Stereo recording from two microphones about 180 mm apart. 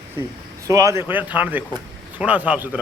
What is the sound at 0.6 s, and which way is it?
Speech, 15° right (ahead or behind).